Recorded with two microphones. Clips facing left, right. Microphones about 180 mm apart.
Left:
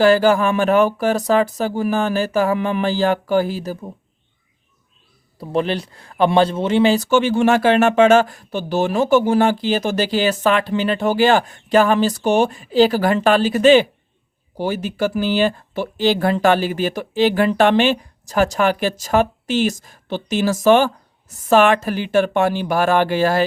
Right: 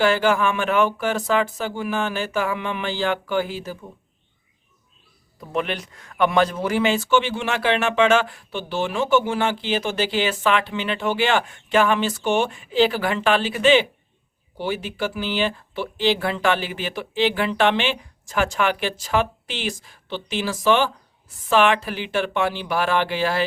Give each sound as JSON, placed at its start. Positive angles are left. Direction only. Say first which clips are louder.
{"t": 0.0, "sound": "speech", "louder": "left 5 dB", "side_deg": 40}
{"t": 5.4, "sound": "speech", "louder": "left 5 dB", "side_deg": 30}